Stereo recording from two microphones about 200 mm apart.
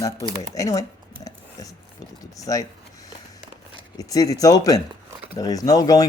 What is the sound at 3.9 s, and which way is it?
Speech, 15° left (ahead or behind).